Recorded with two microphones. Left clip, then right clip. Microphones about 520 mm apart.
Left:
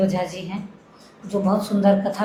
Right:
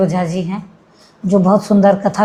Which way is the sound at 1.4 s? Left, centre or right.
Right.